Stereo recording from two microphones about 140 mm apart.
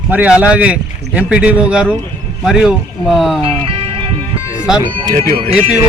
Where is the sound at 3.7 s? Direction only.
40° right (ahead or behind).